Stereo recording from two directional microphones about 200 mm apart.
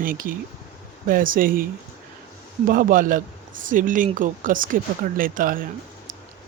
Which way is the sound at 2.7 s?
45° right (ahead or behind).